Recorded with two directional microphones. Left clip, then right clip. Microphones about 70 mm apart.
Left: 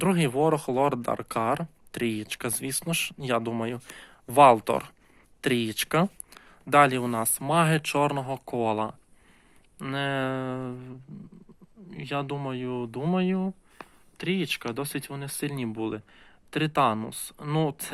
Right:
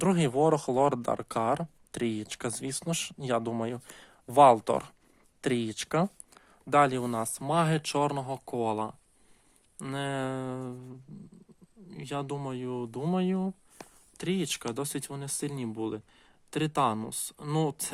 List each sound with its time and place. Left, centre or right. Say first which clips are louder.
0.0 s speech: left 1 dB; right
1.0 s speech: left 2 dB; right
4.7 s speech: left 2 dB; right
5.4 s speech: left 4 dB; right
6.0 s speech: left 3 dB; right
9.7 s speech: left 5 dB; right
14.2 s speech: left 3 dB; right
14.6 s speech: left 2 dB; right
15.4 s speech: left 4 dB; right